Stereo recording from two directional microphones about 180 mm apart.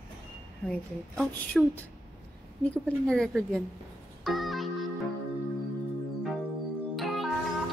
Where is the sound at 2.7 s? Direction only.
5° left (ahead or behind).